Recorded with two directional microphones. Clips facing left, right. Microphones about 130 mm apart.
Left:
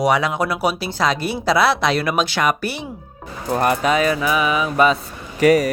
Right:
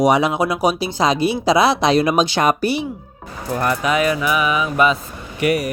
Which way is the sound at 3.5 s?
20° left (ahead or behind).